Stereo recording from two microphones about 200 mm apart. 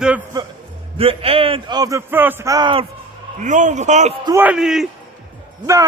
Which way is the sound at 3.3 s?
40° right (ahead or behind).